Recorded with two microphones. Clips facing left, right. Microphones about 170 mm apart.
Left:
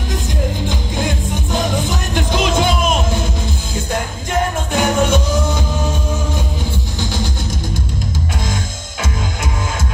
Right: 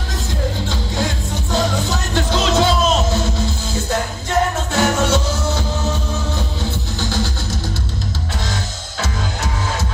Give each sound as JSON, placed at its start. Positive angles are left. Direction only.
{"t": 0.7, "sound": "music", "side_deg": 15}